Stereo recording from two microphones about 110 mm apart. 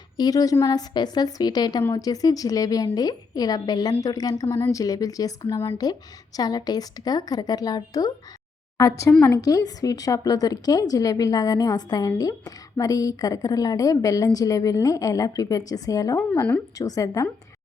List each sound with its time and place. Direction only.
0.2 s a woman's voice: 35° left (ahead or behind)